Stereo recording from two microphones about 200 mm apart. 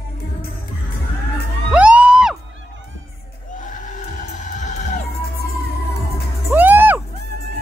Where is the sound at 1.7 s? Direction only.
5° right (ahead or behind).